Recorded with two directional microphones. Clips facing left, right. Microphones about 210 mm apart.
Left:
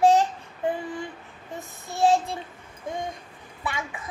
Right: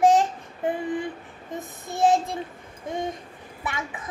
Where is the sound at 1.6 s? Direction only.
20° right (ahead or behind).